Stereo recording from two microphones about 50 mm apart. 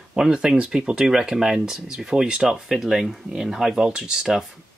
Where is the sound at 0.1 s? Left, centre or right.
Centre.